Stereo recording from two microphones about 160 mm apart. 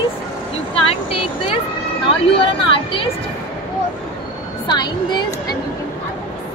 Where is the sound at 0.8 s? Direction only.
35° left (ahead or behind).